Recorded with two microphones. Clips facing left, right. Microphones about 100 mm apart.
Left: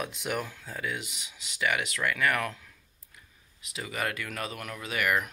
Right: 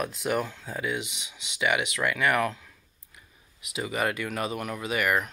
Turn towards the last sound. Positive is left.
turn(degrees=-5)  # may be behind; listen again after turning